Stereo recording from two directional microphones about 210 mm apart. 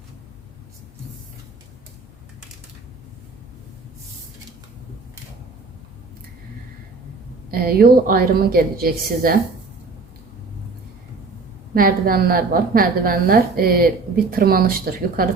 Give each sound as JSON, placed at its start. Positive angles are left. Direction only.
{"t": 7.5, "sound": "a woman's voice", "side_deg": -45}
{"t": 11.7, "sound": "a woman's voice", "side_deg": -45}